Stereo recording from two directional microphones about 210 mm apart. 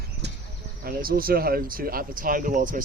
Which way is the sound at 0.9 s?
45° right (ahead or behind).